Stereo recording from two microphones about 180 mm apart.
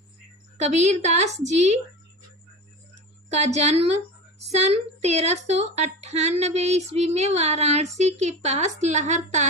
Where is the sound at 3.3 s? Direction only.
40° right (ahead or behind).